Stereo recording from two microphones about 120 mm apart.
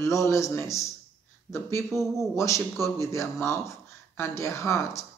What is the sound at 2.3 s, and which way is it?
Speech, 25° left (ahead or behind).